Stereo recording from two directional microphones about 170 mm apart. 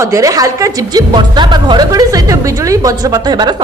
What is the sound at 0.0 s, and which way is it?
Speech, 20° right (ahead or behind).